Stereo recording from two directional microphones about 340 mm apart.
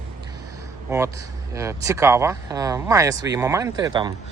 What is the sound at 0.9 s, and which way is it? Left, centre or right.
Speech, centre.